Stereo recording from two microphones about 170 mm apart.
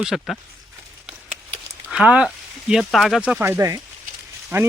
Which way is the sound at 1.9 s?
5° right (ahead or behind).